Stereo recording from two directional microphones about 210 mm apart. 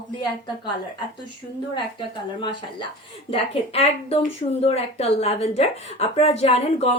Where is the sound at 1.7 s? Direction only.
25° left (ahead or behind).